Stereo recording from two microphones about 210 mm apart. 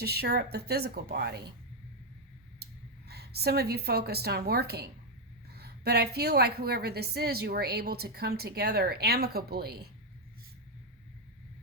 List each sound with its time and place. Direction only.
0.0 s a woman's voice: 50° right (ahead or behind)
3.1 s a woman's voice: 50° right (ahead or behind)